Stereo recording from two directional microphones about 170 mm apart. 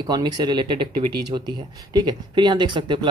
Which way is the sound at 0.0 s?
25° right (ahead or behind).